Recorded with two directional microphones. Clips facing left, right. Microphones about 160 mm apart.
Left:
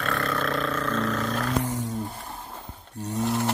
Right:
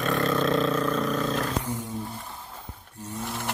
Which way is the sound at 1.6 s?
85° left.